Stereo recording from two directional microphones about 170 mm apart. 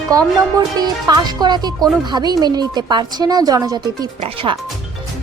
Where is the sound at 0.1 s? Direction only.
20° right (ahead or behind).